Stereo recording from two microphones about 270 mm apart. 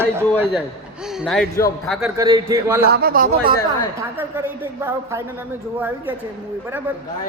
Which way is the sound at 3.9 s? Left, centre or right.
Centre.